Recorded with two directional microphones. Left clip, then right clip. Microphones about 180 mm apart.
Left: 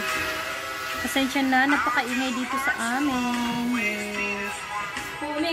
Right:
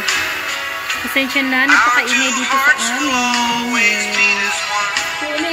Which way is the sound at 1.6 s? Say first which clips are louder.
Right 11 dB; 35° right (ahead or behind).